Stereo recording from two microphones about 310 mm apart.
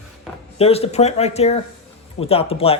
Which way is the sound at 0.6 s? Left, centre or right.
Centre.